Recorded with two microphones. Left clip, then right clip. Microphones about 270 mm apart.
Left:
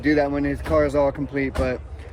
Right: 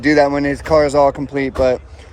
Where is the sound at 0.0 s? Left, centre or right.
Right.